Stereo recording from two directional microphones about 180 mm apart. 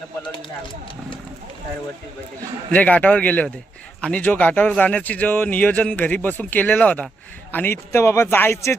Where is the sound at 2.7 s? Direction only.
10° left (ahead or behind).